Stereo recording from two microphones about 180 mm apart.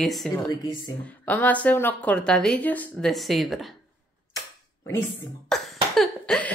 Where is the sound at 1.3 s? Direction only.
10° left (ahead or behind).